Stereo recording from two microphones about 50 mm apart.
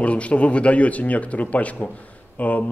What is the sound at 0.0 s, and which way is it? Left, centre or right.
A man's voice, left.